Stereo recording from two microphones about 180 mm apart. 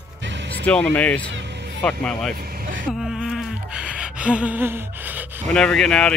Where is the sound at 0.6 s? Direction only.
5° left (ahead or behind).